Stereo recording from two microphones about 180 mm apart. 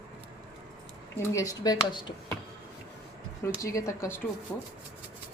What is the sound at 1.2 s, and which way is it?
Speech, 20° left (ahead or behind).